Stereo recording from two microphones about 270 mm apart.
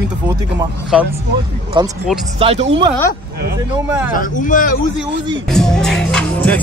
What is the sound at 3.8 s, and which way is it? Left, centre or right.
Speech, centre.